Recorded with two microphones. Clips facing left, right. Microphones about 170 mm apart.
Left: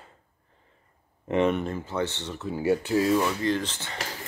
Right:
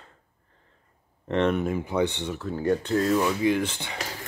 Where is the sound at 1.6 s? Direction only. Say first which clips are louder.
Right 4 dB; 10° right (ahead or behind).